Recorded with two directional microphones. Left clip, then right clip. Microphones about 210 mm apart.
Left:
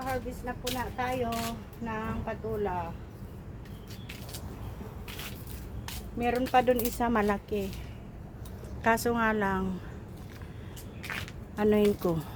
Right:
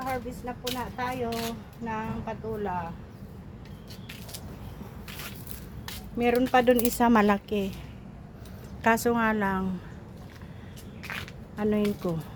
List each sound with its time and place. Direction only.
0.0 s speech: 20° right (ahead or behind)
6.1 s a woman's voice: 55° right (ahead or behind)
8.8 s speech: 20° right (ahead or behind)
11.5 s speech: 20° left (ahead or behind)